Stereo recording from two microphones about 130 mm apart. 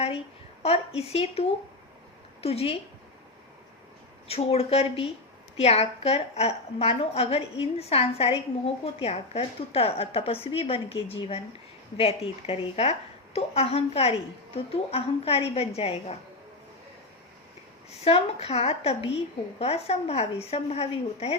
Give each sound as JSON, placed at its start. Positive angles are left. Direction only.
{"t": 0.6, "sound": "a woman's voice", "side_deg": 50}
{"t": 4.3, "sound": "a woman's voice", "side_deg": 50}
{"t": 18.0, "sound": "a woman's voice", "side_deg": 50}